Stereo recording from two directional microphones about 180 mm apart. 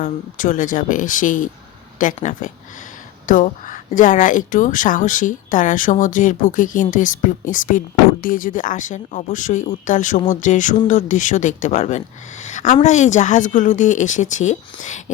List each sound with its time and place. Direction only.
0.0 s speech: 45° left (ahead or behind)